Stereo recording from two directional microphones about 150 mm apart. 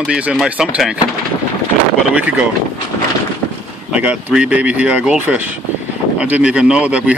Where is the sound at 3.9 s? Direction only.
5° right (ahead or behind).